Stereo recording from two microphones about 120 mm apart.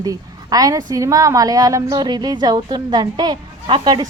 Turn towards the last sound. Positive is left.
turn(degrees=-40)  # may be behind; listen again after turning